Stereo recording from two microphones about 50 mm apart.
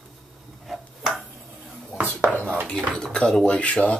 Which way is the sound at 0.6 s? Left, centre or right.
Centre.